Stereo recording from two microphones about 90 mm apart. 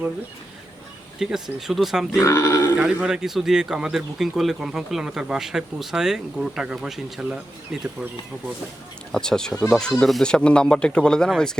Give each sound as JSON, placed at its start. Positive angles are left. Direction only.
{"t": 1.2, "sound": "speech", "side_deg": -5}
{"t": 2.1, "sound": "grunt", "side_deg": 30}
{"t": 2.7, "sound": "speech", "side_deg": -10}
{"t": 9.1, "sound": "speech", "side_deg": 5}